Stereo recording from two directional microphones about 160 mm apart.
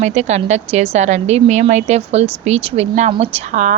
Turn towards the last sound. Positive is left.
turn(degrees=-50)  # may be behind; listen again after turning